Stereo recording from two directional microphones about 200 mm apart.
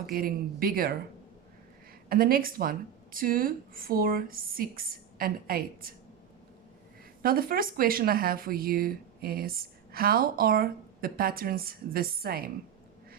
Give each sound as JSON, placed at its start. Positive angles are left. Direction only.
{"t": 0.0, "sound": "speech", "side_deg": -45}
{"t": 2.0, "sound": "speech", "side_deg": -45}
{"t": 7.2, "sound": "speech", "side_deg": -45}